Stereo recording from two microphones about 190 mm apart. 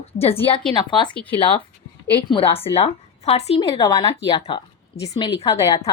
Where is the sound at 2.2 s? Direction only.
25° left (ahead or behind).